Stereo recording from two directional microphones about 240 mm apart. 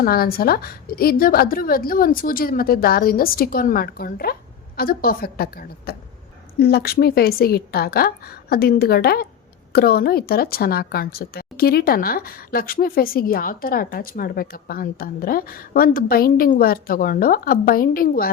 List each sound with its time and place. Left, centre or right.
0.0 s speech: left